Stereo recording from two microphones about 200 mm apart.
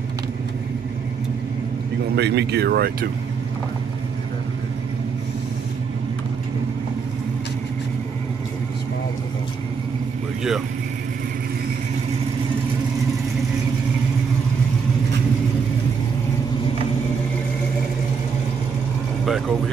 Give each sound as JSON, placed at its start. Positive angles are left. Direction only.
{"t": 2.1, "sound": "speech", "side_deg": -55}